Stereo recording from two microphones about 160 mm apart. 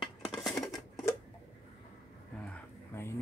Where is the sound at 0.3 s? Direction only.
Centre (ahead or behind).